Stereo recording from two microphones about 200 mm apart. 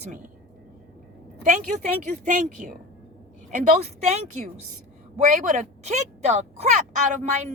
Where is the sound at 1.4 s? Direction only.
35° right (ahead or behind).